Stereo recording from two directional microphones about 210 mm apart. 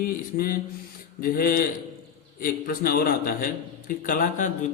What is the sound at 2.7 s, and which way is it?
A man's voice, 45° left (ahead or behind).